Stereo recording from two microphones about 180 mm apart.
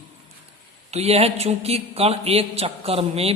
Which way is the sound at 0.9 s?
35° right (ahead or behind).